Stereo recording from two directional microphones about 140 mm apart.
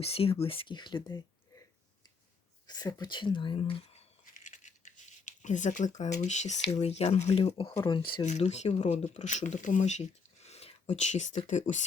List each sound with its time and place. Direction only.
0.0 s speech: 45° left (ahead or behind)
2.6 s speech: 30° left (ahead or behind)
4.4 s rattle: 60° left (ahead or behind)
6.2 s speech: 55° left (ahead or behind); by 8.2 s 35° left (ahead or behind)
8.2 s speech: 55° left (ahead or behind)